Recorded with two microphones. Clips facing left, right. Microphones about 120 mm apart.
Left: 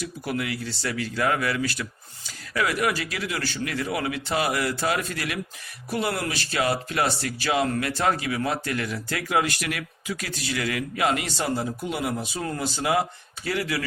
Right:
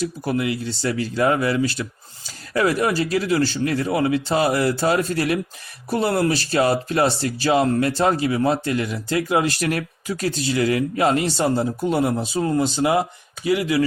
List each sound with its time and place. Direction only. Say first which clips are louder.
0.0 s speech: right 6 dB; 25° right (ahead or behind)